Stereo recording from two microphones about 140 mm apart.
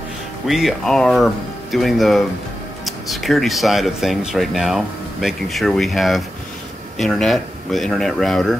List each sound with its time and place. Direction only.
0.5 s speech: centre (ahead or behind)